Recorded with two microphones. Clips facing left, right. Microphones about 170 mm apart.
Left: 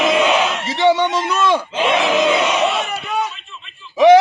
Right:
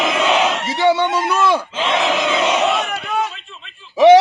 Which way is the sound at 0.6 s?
10° right (ahead or behind).